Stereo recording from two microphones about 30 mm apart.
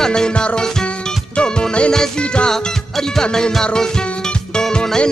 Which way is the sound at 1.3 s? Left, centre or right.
Left.